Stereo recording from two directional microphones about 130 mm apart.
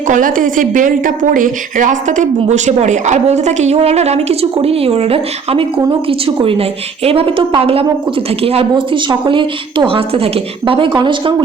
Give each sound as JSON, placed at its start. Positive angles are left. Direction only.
{"t": 0.1, "sound": "a woman's voice", "side_deg": -90}